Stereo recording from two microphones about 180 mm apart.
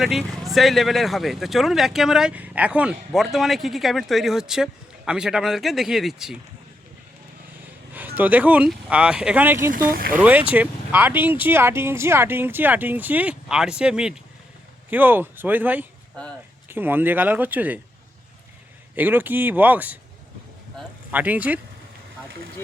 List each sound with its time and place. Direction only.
0.0 s speech: centre (ahead or behind)
7.9 s speech: 10° right (ahead or behind)
9.7 s speech: 55° right (ahead or behind)
10.1 s speech: 10° right (ahead or behind)
18.9 s speech: 10° right (ahead or behind)
21.1 s speech: 10° right (ahead or behind)